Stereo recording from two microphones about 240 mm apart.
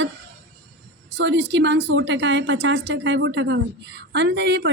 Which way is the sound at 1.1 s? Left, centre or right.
Right.